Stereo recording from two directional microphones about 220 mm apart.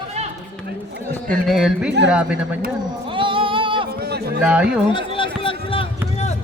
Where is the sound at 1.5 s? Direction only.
Centre (ahead or behind).